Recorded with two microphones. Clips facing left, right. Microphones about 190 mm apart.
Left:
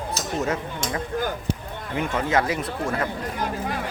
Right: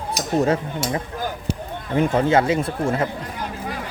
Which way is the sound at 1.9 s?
35° right (ahead or behind).